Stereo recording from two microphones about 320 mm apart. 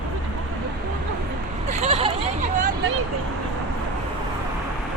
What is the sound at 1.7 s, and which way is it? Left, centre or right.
Hubbub, right.